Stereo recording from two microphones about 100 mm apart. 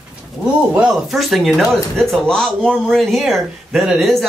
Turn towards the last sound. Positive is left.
turn(degrees=0)  # may be behind; listen again after turning